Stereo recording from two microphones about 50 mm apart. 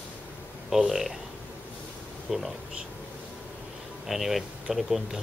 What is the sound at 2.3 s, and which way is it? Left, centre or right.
Speech, centre.